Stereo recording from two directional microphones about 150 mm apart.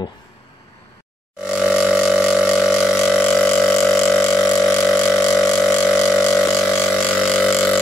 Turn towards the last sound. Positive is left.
turn(degrees=5)  # may be behind; listen again after turning